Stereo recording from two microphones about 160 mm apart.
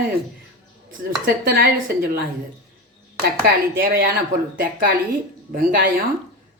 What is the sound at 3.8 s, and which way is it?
Speech, 70° right (ahead or behind).